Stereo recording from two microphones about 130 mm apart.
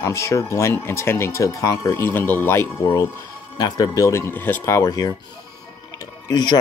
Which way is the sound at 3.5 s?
30° left (ahead or behind).